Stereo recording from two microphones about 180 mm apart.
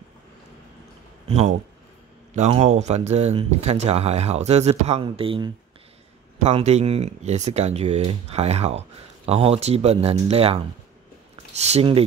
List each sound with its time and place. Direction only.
2.3 s speech: 40° right (ahead or behind)
11.6 s speech: 35° right (ahead or behind)